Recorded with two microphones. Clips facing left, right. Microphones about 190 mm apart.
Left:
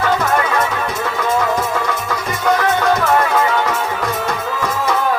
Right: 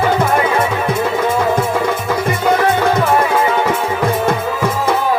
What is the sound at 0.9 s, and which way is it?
Music, 55° right (ahead or behind).